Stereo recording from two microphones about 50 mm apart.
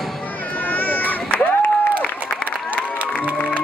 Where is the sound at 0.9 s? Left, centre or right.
Left.